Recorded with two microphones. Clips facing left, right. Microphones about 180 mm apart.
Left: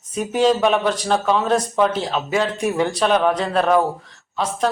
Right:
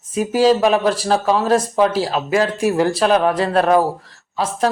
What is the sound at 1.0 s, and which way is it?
Speech, 35° right (ahead or behind).